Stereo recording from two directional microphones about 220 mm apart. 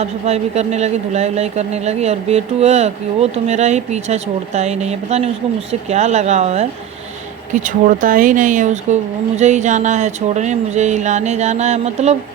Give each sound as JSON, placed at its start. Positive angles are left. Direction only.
{"t": 0.0, "sound": "speech", "side_deg": -30}